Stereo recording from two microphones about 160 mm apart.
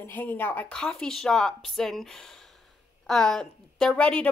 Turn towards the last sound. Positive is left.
turn(degrees=5)  # may be behind; listen again after turning